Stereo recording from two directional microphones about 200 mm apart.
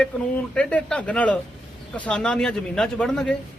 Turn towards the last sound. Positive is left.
turn(degrees=5)  # may be behind; listen again after turning